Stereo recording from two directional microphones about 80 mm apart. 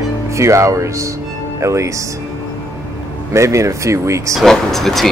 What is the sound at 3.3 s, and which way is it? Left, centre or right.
Speech, right.